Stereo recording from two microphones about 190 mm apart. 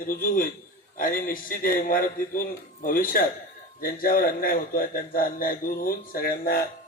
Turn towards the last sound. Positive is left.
turn(degrees=50)  # may be behind; listen again after turning